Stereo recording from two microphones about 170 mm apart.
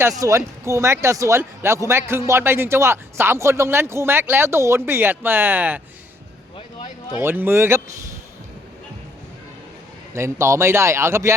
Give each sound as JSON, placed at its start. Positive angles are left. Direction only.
{"t": 0.2, "sound": "speech", "side_deg": -20}
{"t": 7.2, "sound": "speech", "side_deg": -15}
{"t": 10.2, "sound": "speech", "side_deg": -15}